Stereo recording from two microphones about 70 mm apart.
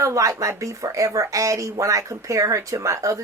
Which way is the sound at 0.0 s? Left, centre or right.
Right.